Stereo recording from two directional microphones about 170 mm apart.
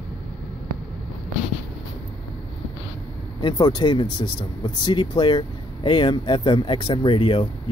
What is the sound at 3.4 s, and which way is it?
Speech, 25° left (ahead or behind).